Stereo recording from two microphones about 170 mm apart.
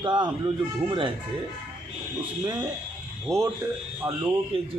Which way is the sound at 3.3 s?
Centre (ahead or behind).